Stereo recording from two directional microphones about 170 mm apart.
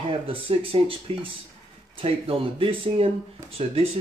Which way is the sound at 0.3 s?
30° right (ahead or behind).